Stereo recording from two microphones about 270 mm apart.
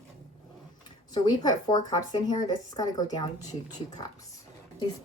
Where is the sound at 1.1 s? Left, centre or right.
Centre.